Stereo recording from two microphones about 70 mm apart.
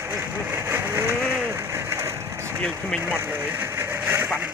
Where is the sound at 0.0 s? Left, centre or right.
Right.